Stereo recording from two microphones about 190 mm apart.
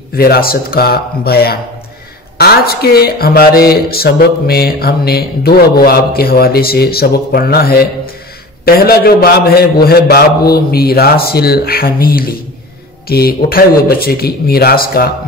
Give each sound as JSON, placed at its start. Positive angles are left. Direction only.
{"t": 0.1, "sound": "speech", "side_deg": 50}